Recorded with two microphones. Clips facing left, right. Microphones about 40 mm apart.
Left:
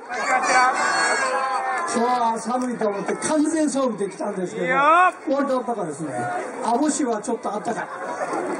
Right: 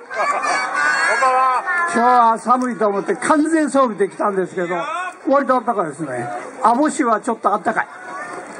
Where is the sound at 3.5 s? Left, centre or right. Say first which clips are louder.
Right 6 dB; centre.